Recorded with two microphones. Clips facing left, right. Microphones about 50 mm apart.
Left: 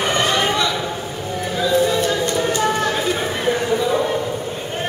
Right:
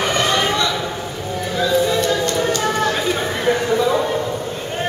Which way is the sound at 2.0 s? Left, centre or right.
Left.